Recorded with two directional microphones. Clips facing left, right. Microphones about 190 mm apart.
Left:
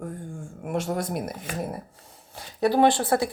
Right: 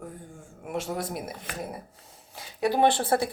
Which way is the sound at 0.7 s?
5° right (ahead or behind).